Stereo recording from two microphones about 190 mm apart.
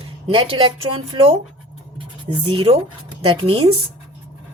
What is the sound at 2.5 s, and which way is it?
A woman's voice, 30° right (ahead or behind).